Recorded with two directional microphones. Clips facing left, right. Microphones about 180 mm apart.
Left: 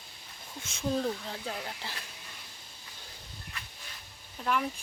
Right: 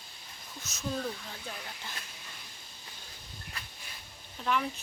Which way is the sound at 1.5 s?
30° left (ahead or behind).